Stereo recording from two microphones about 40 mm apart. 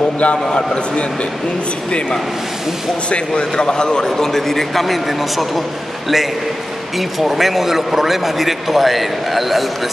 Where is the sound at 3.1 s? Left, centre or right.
Left.